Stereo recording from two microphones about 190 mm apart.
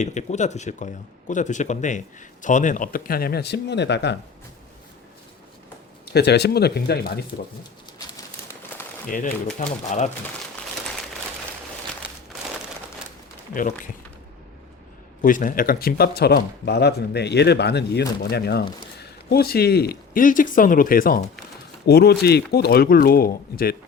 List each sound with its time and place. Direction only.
0.0 s speech: 40° left (ahead or behind); by 4.2 s 65° left (ahead or behind)
6.1 s speech: 60° left (ahead or behind)
9.0 s speech: 45° left (ahead or behind)
13.5 s speech: 45° left (ahead or behind)
15.2 s speech: 45° left (ahead or behind)